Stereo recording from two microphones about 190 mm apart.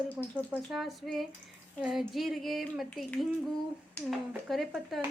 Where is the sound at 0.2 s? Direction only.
5° right (ahead or behind).